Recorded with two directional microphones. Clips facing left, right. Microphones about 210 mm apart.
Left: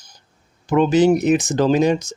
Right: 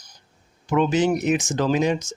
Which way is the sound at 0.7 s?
35° left (ahead or behind).